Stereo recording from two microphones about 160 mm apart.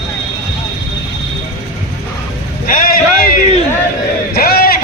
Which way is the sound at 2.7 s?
65° left (ahead or behind).